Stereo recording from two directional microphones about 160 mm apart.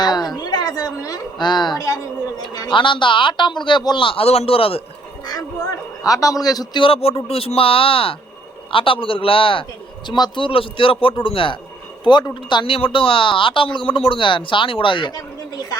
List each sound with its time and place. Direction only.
0.0 s a sound: 25° left (ahead or behind)
0.4 s a woman's voice: 25° left (ahead or behind)
6.0 s speech: 20° left (ahead or behind)